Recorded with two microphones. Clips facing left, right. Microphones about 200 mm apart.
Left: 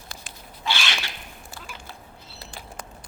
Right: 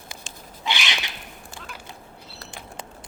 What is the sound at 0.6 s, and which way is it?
Cat, 15° right (ahead or behind).